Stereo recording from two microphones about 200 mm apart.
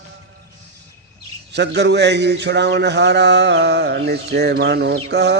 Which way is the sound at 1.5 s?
60° right (ahead or behind).